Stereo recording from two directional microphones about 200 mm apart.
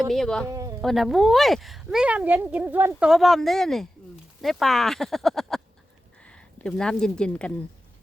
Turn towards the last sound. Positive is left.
turn(degrees=5)  # may be behind; listen again after turning